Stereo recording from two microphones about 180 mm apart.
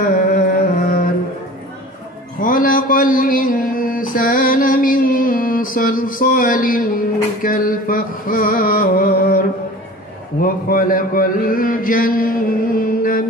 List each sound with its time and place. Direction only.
0.0 s music: 50° left (ahead or behind)
2.4 s mantra: 50° left (ahead or behind)
7.4 s a sound: 50° left (ahead or behind)